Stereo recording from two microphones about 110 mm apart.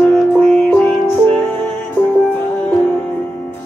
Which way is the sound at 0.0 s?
15° left (ahead or behind).